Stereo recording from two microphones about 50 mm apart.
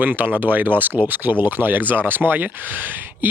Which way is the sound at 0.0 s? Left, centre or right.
Right.